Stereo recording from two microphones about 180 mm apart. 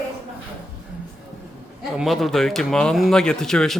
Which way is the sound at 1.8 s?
Centre (ahead or behind).